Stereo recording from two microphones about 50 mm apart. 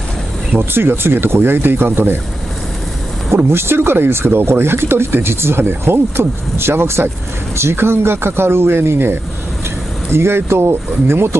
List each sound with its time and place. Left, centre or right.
0.6 s speech: right
3.5 s speech: right